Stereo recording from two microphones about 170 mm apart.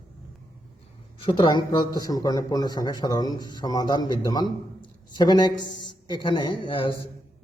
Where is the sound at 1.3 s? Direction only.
30° left (ahead or behind).